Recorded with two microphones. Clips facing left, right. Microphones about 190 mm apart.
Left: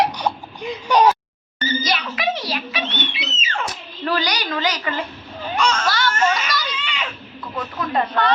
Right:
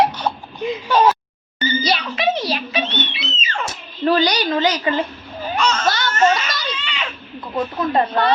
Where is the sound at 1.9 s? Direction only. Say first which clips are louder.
Right 3 dB; 25° right (ahead or behind).